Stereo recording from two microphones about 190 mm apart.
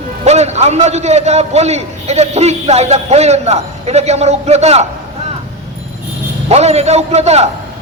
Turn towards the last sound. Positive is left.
turn(degrees=-35)  # may be behind; listen again after turning